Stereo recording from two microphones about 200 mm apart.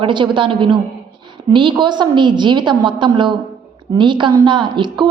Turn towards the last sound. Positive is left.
turn(degrees=-25)  # may be behind; listen again after turning